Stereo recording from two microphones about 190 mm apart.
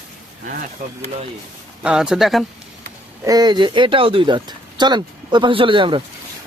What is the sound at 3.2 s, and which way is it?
Speech, 20° right (ahead or behind).